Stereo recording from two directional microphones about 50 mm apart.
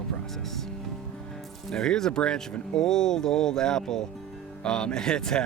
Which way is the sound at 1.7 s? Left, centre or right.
Centre.